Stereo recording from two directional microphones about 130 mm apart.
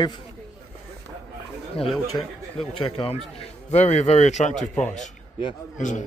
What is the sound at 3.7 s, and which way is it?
Speech, 60° left (ahead or behind).